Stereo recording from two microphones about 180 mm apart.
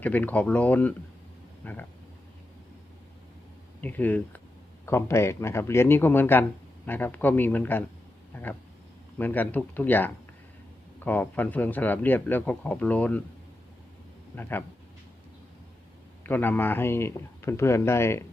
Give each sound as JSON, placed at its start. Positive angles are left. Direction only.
{"t": 0.0, "sound": "speech", "side_deg": 10}
{"t": 3.8, "sound": "speech", "side_deg": 10}
{"t": 8.3, "sound": "a sound", "side_deg": 10}
{"t": 9.1, "sound": "speech", "side_deg": 10}
{"t": 16.2, "sound": "speech", "side_deg": 10}